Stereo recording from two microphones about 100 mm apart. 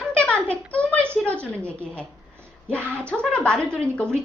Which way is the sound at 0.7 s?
10° left (ahead or behind).